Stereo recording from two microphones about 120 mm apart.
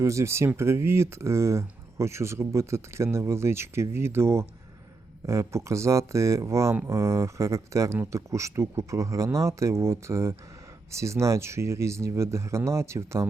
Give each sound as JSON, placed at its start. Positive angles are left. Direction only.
{"t": 0.0, "sound": "speech", "side_deg": -25}